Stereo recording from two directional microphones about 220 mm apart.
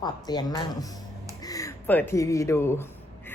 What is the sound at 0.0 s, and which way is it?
A woman's voice, 20° left (ahead or behind).